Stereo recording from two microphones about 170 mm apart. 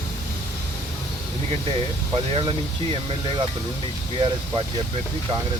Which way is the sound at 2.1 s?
30° right (ahead or behind).